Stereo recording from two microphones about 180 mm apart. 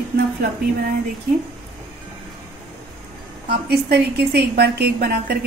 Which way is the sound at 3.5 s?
65° right (ahead or behind).